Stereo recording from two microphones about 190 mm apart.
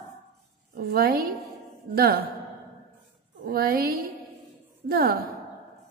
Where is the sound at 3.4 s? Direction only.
50° right (ahead or behind).